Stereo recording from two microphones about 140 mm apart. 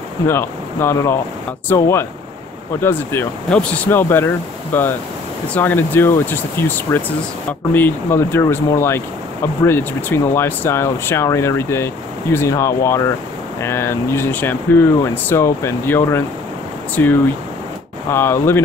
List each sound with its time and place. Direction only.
0.3 s speech: 15° left (ahead or behind)